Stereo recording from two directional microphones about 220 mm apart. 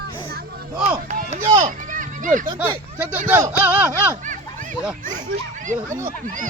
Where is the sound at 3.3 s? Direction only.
10° right (ahead or behind).